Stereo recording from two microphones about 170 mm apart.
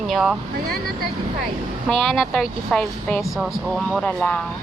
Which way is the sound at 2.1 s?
Centre (ahead or behind).